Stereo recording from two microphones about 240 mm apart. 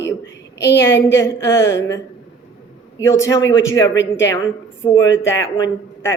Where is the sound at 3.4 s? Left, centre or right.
Left.